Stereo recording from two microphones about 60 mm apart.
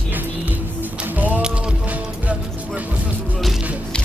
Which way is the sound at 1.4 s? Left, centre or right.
Centre.